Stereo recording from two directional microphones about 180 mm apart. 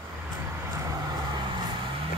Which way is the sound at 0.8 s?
25° right (ahead or behind).